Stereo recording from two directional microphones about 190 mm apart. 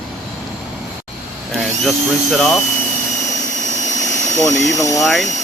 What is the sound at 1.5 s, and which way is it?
Speech, centre (ahead or behind).